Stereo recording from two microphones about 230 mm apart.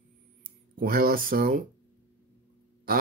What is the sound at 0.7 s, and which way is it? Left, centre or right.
Speech, right.